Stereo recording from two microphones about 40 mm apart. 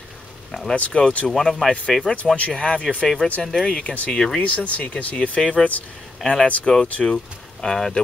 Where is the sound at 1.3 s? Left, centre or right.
Centre.